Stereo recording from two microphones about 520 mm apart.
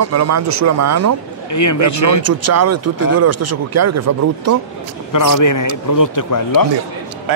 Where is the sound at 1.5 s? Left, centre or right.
Left.